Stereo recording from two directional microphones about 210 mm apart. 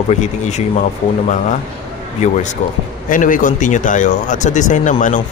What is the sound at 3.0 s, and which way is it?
A man's voice, 40° left (ahead or behind).